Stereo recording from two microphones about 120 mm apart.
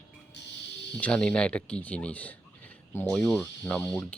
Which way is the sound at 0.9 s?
10° left (ahead or behind).